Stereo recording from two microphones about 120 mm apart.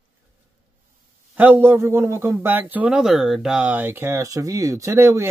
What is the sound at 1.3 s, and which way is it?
A man's voice, 15° right (ahead or behind).